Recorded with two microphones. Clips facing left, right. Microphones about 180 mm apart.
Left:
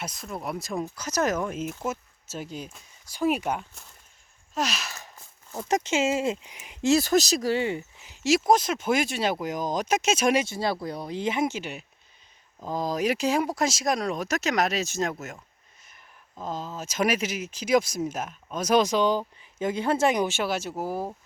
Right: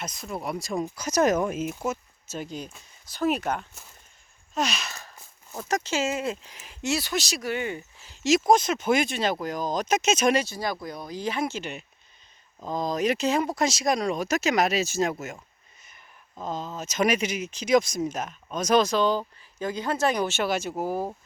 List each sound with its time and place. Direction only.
0.1 s speech: 5° right (ahead or behind)
0.9 s speech: 15° right (ahead or behind)
1.9 s speech: 5° left (ahead or behind)
4.5 s a sound: 5° left (ahead or behind)
5.6 s speech: 25° left (ahead or behind)
6.9 s speech: 40° left (ahead or behind); by 10.4 s 5° left (ahead or behind)
10.4 s speech: 25° left (ahead or behind)
11.6 s speech: 5° left (ahead or behind)